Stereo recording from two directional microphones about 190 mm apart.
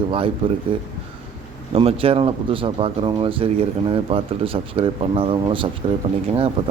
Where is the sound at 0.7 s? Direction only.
30° right (ahead or behind).